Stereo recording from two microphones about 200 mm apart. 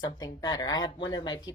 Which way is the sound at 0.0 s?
20° left (ahead or behind).